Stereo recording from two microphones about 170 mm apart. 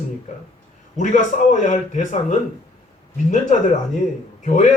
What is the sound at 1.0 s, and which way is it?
Speech, 45° left (ahead or behind).